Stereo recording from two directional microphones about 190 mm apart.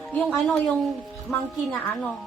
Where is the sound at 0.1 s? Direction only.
5° left (ahead or behind).